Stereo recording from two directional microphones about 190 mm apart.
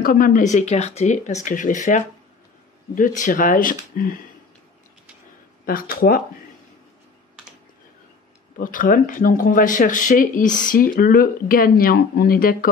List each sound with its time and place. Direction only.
0.0 s speech: 50° left (ahead or behind)
5.7 s speech: 50° left (ahead or behind)
8.5 s speech: 45° left (ahead or behind)